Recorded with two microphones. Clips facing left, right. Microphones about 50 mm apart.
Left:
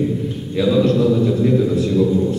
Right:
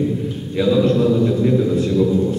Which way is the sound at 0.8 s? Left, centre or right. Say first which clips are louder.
Even; right.